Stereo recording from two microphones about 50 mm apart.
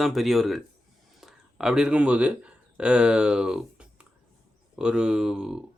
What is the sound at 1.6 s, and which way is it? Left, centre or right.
A man's voice, centre.